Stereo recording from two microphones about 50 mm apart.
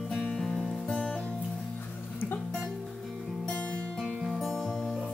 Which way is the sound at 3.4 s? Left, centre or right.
Left.